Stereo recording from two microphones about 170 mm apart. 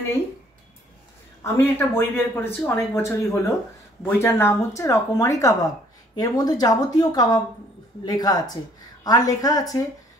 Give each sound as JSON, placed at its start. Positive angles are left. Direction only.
{"t": 1.4, "sound": "speech", "side_deg": 15}